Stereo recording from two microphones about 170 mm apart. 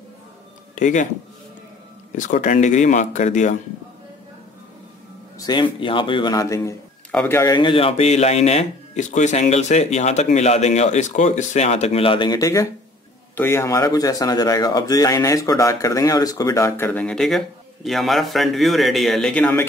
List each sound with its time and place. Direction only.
0.7 s speech: 50° left (ahead or behind)
2.1 s speech: 50° left (ahead or behind)
5.4 s speech: 25° left (ahead or behind)
7.5 s speech: 30° left (ahead or behind); by 19.5 s 5° left (ahead or behind)